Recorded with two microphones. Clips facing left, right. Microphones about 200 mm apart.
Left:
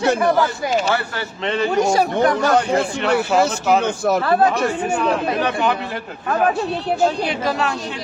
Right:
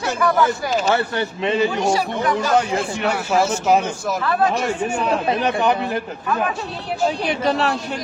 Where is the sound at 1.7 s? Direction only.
45° left (ahead or behind).